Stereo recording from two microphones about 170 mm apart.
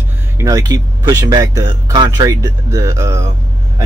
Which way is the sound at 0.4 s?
20° right (ahead or behind).